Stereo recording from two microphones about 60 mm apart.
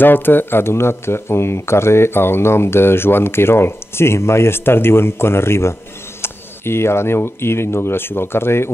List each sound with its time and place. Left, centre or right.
0.0 s speech: left